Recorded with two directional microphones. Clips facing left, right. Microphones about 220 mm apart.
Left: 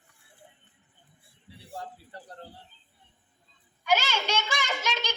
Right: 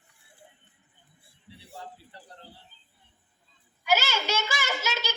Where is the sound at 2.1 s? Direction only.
45° left (ahead or behind).